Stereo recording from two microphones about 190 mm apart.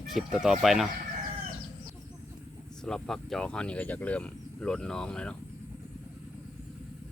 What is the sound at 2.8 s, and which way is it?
Speech, centre (ahead or behind).